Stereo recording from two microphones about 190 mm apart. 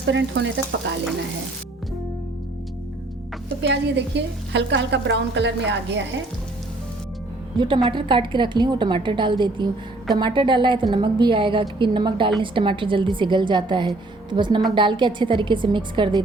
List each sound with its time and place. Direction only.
0.0 s a woman's voice: 65° right (ahead or behind)
3.6 s a woman's voice: 65° right (ahead or behind)
7.9 s a woman's voice: 25° right (ahead or behind)